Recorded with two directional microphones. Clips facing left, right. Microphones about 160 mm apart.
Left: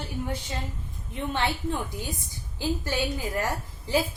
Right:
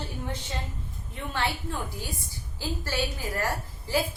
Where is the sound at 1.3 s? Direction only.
20° left (ahead or behind).